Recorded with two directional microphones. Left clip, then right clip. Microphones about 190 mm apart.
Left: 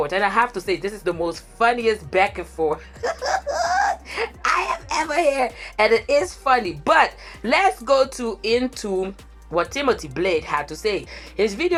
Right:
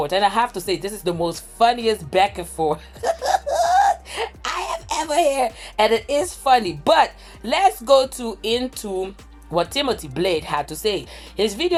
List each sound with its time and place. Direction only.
0.0 s speech: 20° right (ahead or behind)